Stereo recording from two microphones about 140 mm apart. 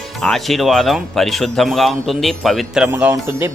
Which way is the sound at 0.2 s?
Centre (ahead or behind).